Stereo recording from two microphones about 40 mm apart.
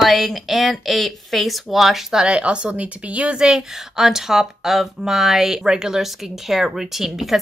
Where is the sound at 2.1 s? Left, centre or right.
Centre.